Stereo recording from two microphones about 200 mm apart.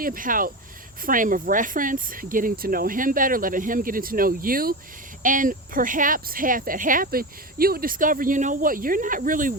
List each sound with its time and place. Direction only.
0.0 s speech: 45° right (ahead or behind)